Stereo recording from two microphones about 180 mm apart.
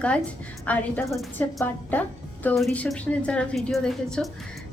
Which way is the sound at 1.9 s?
10° left (ahead or behind).